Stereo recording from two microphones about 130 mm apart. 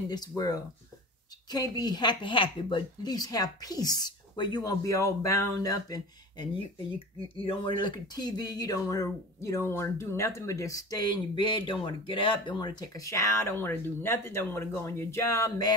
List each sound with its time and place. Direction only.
1.5 s speech: 30° left (ahead or behind)